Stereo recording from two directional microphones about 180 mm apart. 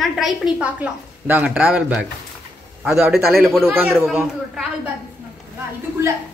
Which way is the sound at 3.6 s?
15° right (ahead or behind).